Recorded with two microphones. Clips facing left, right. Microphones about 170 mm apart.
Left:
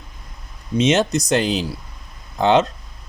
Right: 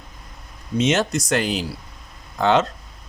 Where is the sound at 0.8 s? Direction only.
20° left (ahead or behind).